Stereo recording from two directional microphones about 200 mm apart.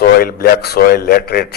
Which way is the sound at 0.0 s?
50° left (ahead or behind).